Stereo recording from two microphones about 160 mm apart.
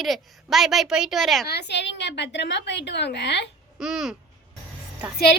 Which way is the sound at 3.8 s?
5° right (ahead or behind).